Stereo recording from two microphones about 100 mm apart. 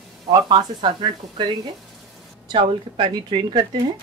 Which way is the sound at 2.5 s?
55° right (ahead or behind).